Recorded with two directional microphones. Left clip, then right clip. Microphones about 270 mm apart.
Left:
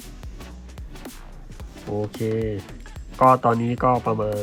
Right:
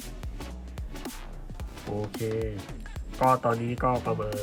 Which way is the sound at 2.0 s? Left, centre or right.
Centre.